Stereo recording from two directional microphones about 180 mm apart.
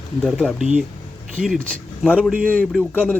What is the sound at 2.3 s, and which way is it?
Speech, 5° right (ahead or behind).